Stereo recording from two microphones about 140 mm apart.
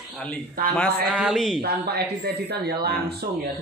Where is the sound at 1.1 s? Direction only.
Centre (ahead or behind).